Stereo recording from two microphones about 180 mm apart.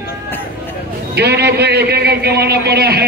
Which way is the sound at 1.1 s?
65° right (ahead or behind).